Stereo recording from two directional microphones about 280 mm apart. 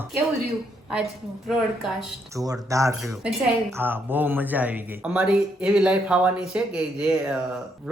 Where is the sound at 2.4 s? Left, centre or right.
Centre.